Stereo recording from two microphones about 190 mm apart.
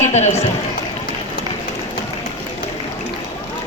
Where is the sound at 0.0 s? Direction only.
35° left (ahead or behind).